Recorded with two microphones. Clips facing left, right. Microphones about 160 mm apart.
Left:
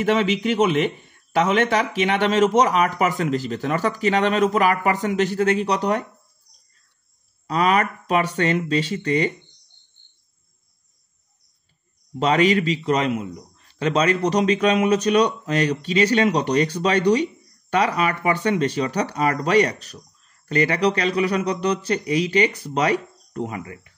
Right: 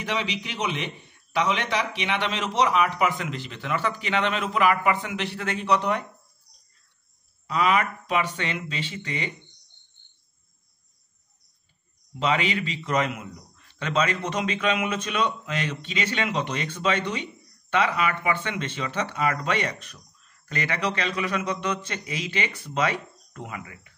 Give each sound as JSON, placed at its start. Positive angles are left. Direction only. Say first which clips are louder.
{"t": 0.0, "sound": "a man's voice", "louder": "left 10 dB", "side_deg": 50}
{"t": 7.4, "sound": "a man's voice", "louder": "left 3 dB", "side_deg": 40}
{"t": 12.2, "sound": "a man's voice", "louder": "left 7 dB", "side_deg": 40}